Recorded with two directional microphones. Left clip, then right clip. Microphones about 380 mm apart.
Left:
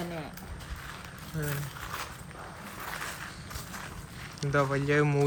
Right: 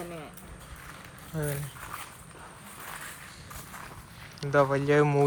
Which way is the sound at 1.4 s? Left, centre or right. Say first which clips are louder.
Right 3 dB; centre.